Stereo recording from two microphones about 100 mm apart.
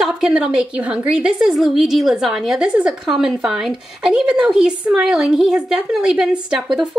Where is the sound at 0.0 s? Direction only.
5° right (ahead or behind).